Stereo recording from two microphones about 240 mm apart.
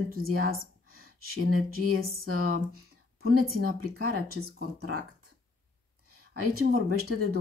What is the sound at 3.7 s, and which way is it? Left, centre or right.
Speech, right.